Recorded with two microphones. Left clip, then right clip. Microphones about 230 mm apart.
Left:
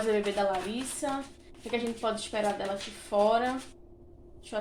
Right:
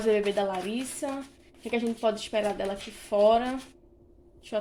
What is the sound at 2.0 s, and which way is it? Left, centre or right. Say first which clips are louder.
A woman's voice: right 4 dB; right.